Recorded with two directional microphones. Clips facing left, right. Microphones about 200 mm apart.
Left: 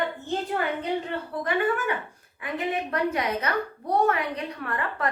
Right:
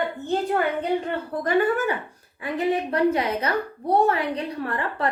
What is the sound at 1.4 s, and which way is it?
A woman's voice, 40° right (ahead or behind).